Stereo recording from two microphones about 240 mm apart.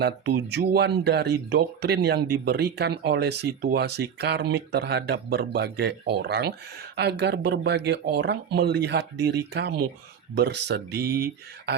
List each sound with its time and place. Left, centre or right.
0.0 s speech: right